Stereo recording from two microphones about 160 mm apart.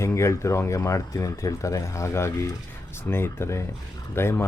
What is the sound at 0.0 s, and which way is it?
Speech, 15° left (ahead or behind).